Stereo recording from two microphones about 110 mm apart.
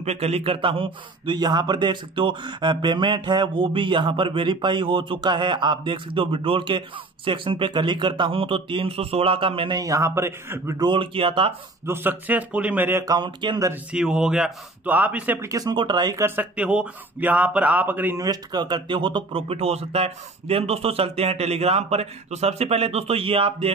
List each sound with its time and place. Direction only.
0.0 s a man's voice: 70° right (ahead or behind); by 9.8 s 55° right (ahead or behind)
9.8 s a man's voice: 30° right (ahead or behind)
10.8 s a man's voice: 50° right (ahead or behind)
11.8 s a man's voice: 20° right (ahead or behind)
13.0 s a man's voice: 40° right (ahead or behind)
13.9 s a man's voice: 5° right (ahead or behind)
15.4 s speech: 35° right (ahead or behind)
16.2 s a man's voice: 20° right (ahead or behind)
16.5 s a man's voice: 10° right (ahead or behind)
18.1 s speech: 35° right (ahead or behind); by 23.7 s 60° right (ahead or behind)